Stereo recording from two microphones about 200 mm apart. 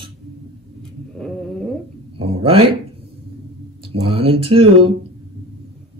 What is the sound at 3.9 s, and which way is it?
Speech, 30° right (ahead or behind).